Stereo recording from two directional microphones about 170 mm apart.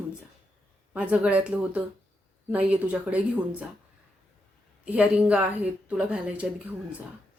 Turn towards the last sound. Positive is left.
turn(degrees=-5)  # may be behind; listen again after turning